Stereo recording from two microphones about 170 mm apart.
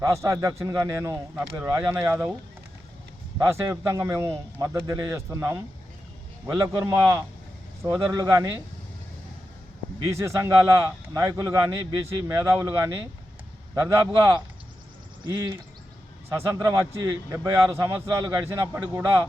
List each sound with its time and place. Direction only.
0.0 s a man's voice: 15° right (ahead or behind)
3.3 s a man's voice: 15° right (ahead or behind)
10.2 s a man's voice: 15° right (ahead or behind)
16.3 s a man's voice: 20° right (ahead or behind)